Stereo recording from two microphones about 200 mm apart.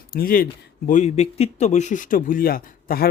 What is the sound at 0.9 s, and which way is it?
A man's voice, 35° left (ahead or behind).